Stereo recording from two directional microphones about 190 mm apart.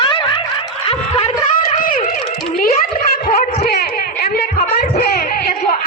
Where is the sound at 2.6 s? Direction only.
50° left (ahead or behind).